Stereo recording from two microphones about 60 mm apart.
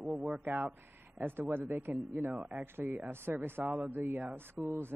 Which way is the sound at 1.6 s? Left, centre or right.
Right.